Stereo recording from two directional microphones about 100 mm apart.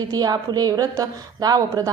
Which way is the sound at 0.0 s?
40° right (ahead or behind).